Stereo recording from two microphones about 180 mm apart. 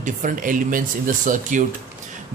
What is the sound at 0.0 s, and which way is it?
Speech, 45° right (ahead or behind).